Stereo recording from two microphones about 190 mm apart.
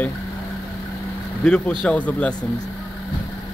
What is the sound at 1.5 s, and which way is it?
Speech, 5° left (ahead or behind).